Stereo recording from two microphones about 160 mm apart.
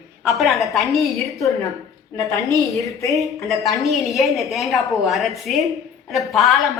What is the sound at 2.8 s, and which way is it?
Speech, 20° left (ahead or behind).